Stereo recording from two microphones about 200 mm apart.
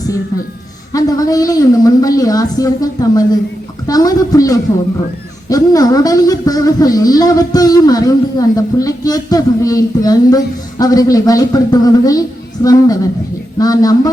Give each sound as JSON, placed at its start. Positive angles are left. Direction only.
{"t": 0.9, "sound": "a woman's voice", "side_deg": 20}